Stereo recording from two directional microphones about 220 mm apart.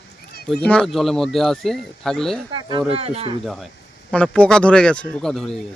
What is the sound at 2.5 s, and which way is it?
Speech, 20° right (ahead or behind).